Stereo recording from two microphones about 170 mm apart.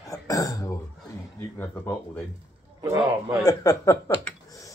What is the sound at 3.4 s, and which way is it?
Speech, 20° left (ahead or behind).